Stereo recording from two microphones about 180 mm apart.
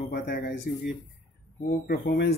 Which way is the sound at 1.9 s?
60° left (ahead or behind).